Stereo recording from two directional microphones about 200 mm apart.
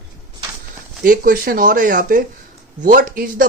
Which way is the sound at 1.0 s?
45° right (ahead or behind).